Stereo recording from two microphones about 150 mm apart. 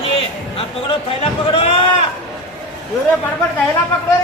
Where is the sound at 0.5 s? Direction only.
40° left (ahead or behind).